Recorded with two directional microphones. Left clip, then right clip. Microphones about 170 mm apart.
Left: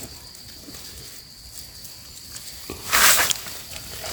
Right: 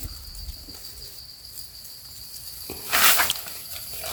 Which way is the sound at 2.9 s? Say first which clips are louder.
Left 2 dB; 45° left (ahead or behind).